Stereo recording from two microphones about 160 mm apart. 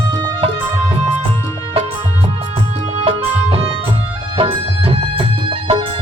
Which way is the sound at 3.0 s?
35° right (ahead or behind).